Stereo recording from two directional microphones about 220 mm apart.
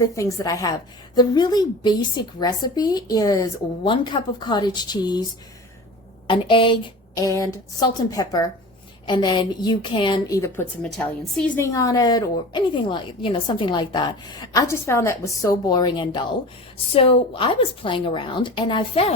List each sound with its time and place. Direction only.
0.0 s a woman's voice: 15° left (ahead or behind)
6.2 s a woman's voice: 25° left (ahead or behind)
10.8 s a woman's voice: centre (ahead or behind); by 19.1 s 25° left (ahead or behind)